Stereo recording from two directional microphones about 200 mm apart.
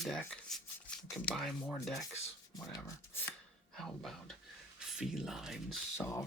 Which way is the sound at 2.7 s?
15° left (ahead or behind).